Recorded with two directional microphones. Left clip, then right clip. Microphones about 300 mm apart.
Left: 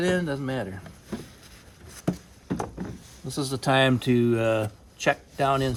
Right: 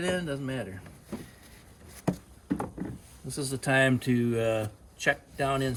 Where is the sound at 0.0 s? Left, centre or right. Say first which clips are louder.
Left 5 dB; centre.